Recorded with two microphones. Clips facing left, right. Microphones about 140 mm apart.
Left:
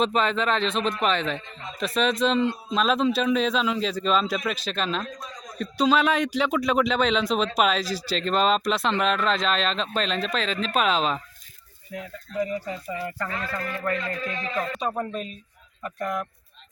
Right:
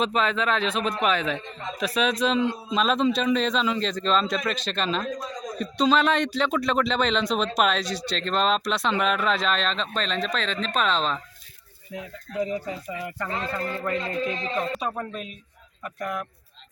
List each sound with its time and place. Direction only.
0.0 s a man's voice: centre (ahead or behind)
12.4 s speech: 20° right (ahead or behind)
15.1 s a man's voice: 5° right (ahead or behind)